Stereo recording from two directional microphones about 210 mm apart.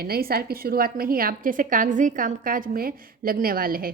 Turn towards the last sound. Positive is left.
turn(degrees=-45)  # may be behind; listen again after turning